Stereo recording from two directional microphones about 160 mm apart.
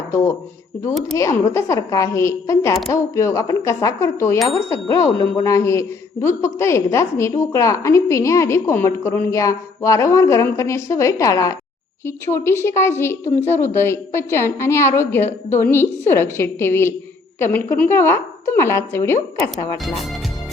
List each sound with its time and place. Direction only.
1.1 s a woman's voice: 20° left (ahead or behind)
19.8 s speech: centre (ahead or behind)